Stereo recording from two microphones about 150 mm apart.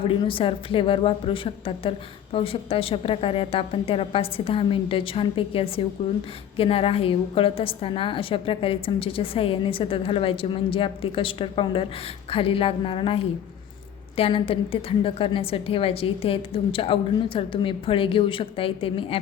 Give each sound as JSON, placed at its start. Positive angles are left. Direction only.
{"t": 0.1, "sound": "a woman's voice", "side_deg": 35}
{"t": 14.2, "sound": "a woman's voice", "side_deg": 40}